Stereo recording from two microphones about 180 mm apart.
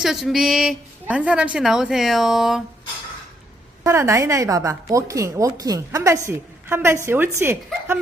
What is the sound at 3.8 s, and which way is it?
A woman's voice, 15° right (ahead or behind).